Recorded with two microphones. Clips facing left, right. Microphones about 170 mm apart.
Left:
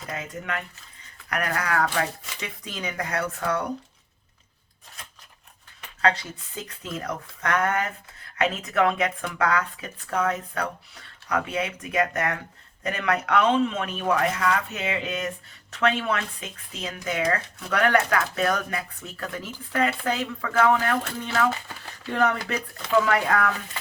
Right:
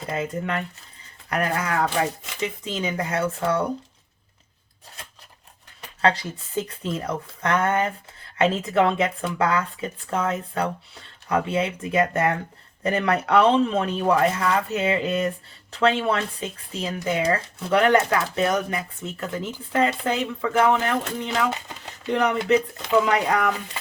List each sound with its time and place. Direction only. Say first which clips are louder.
0.0 s speech: right 7 dB; 30° right (ahead or behind)
6.6 s speech: right 7 dB; 25° right (ahead or behind)